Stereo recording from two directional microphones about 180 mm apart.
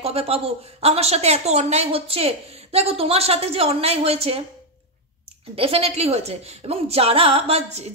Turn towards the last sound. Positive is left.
turn(degrees=-35)  # may be behind; listen again after turning